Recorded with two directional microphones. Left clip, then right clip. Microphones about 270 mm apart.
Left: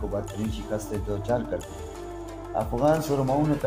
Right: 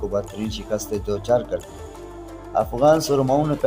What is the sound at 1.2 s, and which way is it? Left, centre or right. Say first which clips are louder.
Speech: right 7 dB; right.